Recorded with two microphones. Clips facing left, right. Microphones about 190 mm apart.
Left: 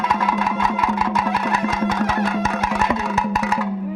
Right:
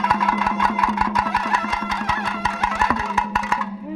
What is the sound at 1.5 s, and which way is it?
Music, 35° left (ahead or behind).